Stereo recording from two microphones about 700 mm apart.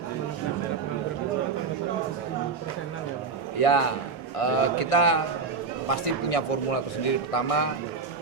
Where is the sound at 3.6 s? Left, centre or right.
Left.